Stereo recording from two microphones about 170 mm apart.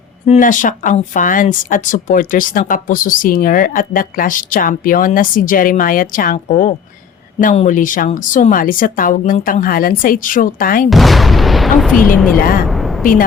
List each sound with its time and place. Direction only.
0.3 s speech: 50° left (ahead or behind)
10.8 s speech: centre (ahead or behind)
12.4 s a woman's voice: 60° left (ahead or behind)
12.6 s a sound: centre (ahead or behind)